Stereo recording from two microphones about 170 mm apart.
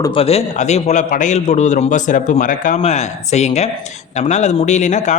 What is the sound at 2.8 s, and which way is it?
Speech, 40° left (ahead or behind).